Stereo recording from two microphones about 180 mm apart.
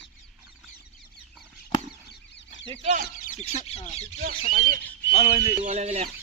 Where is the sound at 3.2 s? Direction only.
40° left (ahead or behind).